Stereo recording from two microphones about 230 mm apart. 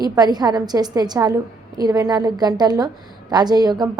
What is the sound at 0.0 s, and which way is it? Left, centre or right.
A woman's voice, centre.